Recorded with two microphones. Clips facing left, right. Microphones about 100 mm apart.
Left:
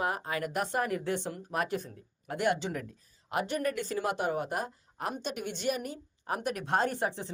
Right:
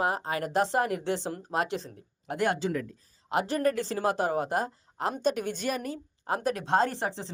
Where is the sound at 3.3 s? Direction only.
30° right (ahead or behind).